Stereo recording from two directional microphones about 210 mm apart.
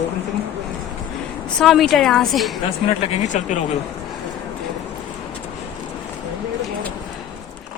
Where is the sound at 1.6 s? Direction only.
Centre (ahead or behind).